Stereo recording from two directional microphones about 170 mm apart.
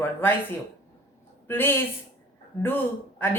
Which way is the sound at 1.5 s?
15° left (ahead or behind).